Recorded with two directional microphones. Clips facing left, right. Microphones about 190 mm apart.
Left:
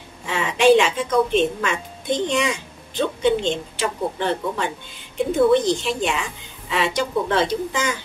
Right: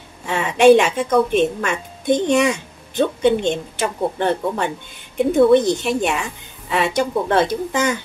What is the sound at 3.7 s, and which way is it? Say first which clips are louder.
Speech: right 3 dB; 50° right (ahead or behind).